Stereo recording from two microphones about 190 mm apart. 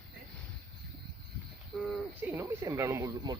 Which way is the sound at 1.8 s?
5° right (ahead or behind).